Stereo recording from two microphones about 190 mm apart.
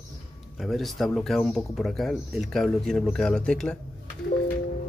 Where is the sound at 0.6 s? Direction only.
Centre (ahead or behind).